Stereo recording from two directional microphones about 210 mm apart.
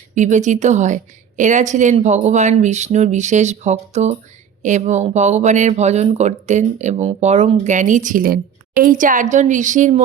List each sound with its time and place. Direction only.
0.1 s speech: 35° right (ahead or behind)